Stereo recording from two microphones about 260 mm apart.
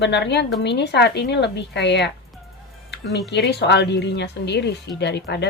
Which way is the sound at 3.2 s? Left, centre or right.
Left.